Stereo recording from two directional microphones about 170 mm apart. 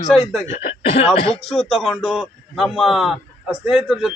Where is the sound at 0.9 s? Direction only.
35° left (ahead or behind).